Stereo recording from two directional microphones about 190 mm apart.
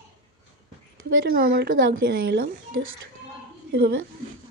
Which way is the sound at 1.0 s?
55° right (ahead or behind).